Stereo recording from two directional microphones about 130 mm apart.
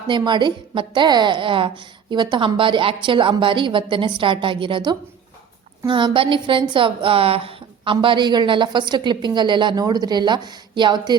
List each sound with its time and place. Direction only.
0.1 s a woman's voice: 35° right (ahead or behind)